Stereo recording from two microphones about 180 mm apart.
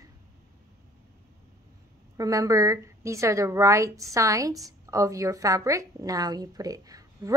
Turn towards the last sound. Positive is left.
turn(degrees=-20)  # may be behind; listen again after turning